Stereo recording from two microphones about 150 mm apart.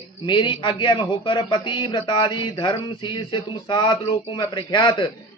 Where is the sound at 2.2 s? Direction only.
30° left (ahead or behind).